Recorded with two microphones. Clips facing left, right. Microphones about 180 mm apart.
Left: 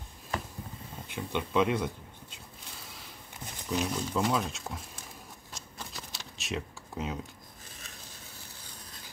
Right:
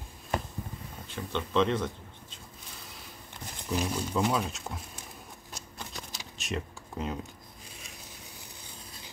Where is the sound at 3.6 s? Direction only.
5° right (ahead or behind).